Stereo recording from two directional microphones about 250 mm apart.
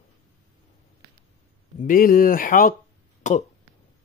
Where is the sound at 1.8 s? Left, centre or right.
Left.